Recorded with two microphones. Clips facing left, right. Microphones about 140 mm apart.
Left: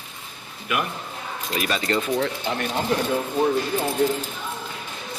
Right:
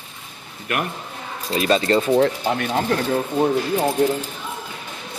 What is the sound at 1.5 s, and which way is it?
Speech, 30° right (ahead or behind).